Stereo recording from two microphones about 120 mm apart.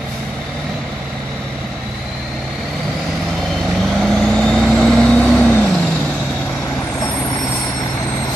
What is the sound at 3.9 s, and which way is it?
Vehicle, centre (ahead or behind).